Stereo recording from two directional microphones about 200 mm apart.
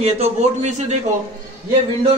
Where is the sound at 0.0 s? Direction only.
30° right (ahead or behind).